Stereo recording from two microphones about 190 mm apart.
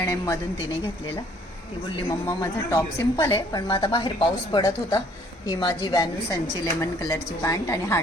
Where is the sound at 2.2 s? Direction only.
15° left (ahead or behind).